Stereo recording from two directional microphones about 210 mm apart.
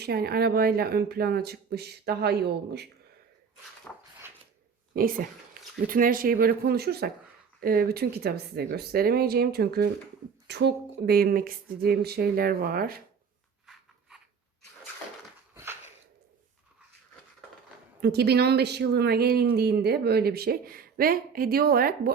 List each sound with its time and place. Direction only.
0.0 s speech: 50° right (ahead or behind)
3.9 s dog: 10° left (ahead or behind)
4.9 s speech: 40° right (ahead or behind)
15.5 s a sound: 10° right (ahead or behind)
18.0 s speech: 50° right (ahead or behind)